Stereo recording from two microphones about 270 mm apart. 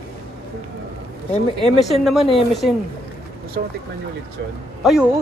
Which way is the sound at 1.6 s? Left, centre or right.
Centre.